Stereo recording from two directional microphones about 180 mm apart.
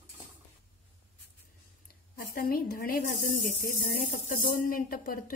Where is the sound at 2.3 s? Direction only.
55° left (ahead or behind).